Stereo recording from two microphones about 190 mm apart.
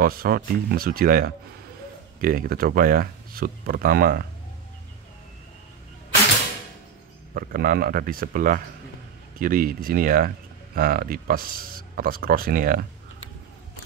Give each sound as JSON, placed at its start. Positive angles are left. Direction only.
{"t": 0.0, "sound": "speech", "side_deg": -50}
{"t": 7.3, "sound": "speech", "side_deg": -50}